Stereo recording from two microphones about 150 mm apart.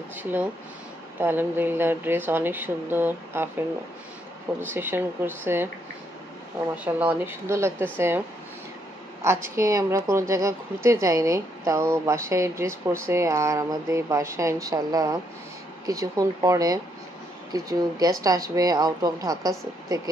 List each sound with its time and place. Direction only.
0.1 s speech: 10° right (ahead or behind)
4.7 s speech: 15° right (ahead or behind)
6.7 s speech: 10° right (ahead or behind)
9.2 s a woman's voice: 20° right (ahead or behind)